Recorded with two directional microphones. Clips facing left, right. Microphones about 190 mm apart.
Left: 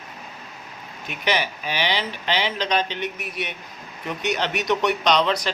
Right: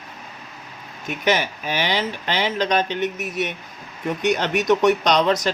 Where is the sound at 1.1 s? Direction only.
45° right (ahead or behind).